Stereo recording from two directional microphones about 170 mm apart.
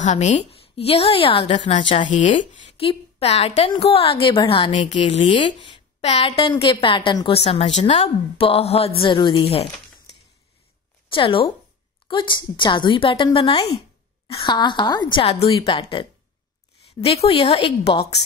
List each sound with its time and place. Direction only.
0.0 s a woman's voice: 45° left (ahead or behind)
11.1 s a woman's voice: 30° left (ahead or behind)